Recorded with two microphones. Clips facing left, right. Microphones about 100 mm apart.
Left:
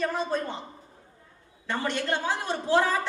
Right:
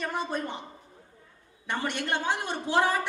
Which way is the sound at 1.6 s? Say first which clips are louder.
Left 2 dB; 20° right (ahead or behind).